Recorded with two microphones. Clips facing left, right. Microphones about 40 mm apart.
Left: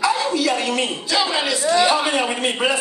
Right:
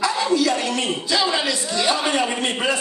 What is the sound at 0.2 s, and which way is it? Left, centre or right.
Speech, centre.